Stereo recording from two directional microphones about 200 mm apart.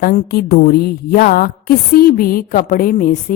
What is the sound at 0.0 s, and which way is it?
A woman's voice, 50° left (ahead or behind).